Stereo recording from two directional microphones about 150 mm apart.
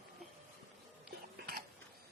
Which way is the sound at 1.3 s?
90° right.